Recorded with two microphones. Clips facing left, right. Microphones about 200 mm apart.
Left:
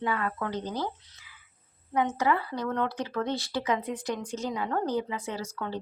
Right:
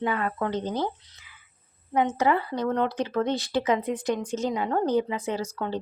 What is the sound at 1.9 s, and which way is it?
Speech, 20° right (ahead or behind).